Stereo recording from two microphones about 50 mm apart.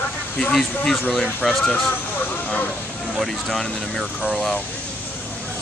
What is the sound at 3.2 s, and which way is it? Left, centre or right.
Speech, centre.